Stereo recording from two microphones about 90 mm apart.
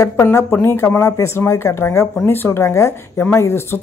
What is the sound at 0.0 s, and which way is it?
Speech, 30° left (ahead or behind).